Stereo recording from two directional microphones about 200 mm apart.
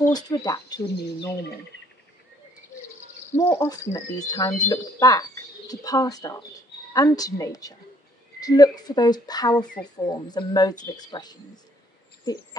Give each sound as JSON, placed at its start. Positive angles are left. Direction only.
{"t": 0.1, "sound": "speech", "side_deg": 20}
{"t": 3.3, "sound": "speech", "side_deg": 20}